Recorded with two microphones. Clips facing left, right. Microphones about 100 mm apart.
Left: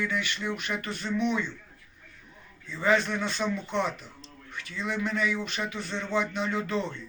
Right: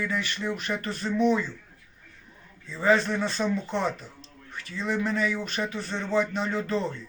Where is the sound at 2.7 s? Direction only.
35° right (ahead or behind).